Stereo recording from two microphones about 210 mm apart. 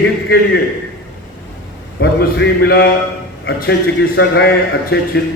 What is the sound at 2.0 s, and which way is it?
A man's voice, 50° left (ahead or behind).